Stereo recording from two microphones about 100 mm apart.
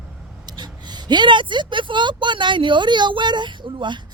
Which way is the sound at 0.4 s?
45° right (ahead or behind).